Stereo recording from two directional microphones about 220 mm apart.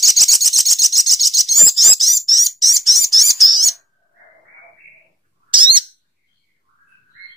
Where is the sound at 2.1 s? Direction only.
15° right (ahead or behind).